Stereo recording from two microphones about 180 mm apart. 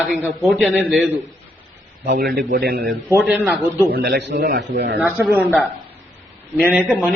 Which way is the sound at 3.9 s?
60° right (ahead or behind).